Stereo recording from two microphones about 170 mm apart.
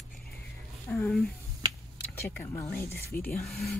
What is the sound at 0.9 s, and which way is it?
Speech, 5° left (ahead or behind).